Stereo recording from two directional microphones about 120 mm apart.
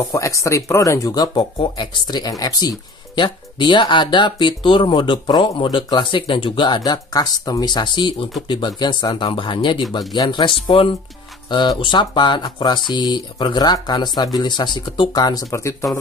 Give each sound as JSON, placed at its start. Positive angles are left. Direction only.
{"t": 0.0, "sound": "speech", "side_deg": 25}
{"t": 3.2, "sound": "speech", "side_deg": 45}